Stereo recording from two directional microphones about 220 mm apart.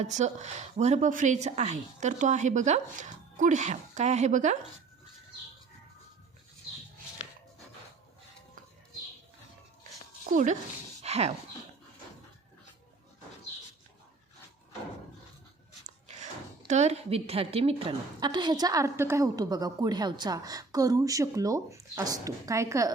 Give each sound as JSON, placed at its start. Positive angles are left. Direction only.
{"t": 0.0, "sound": "a woman's voice", "side_deg": -30}
{"t": 10.2, "sound": "a woman's voice", "side_deg": -35}
{"t": 11.0, "sound": "a sound", "side_deg": -30}
{"t": 16.6, "sound": "a woman's voice", "side_deg": -30}